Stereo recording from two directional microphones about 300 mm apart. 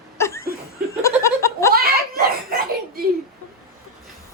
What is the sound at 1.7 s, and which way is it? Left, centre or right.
A child's voice, right.